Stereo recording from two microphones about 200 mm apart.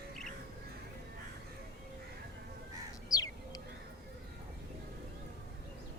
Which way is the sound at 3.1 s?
20° left (ahead or behind).